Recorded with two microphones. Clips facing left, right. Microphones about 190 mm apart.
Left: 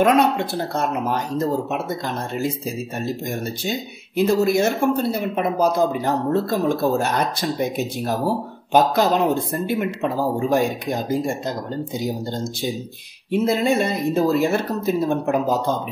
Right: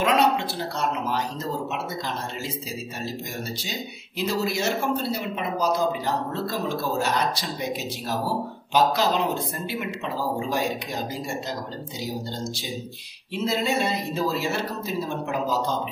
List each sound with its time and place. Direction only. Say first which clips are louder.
0.0 s speech: left 5 dB; 50° left (ahead or behind)
4.2 s speech: left 8 dB; 50° left (ahead or behind)
13.3 s speech: left 6 dB; 50° left (ahead or behind)